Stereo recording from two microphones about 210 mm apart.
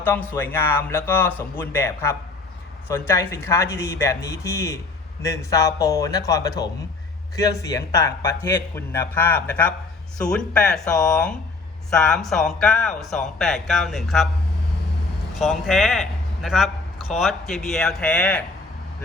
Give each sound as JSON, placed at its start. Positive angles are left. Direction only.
{"t": 0.0, "sound": "a man's voice", "side_deg": 10}
{"t": 15.4, "sound": "a man's voice", "side_deg": 0}